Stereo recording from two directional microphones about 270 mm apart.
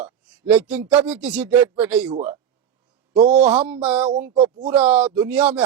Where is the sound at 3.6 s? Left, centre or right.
Centre.